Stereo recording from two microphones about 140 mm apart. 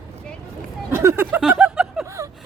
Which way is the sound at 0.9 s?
15° right (ahead or behind).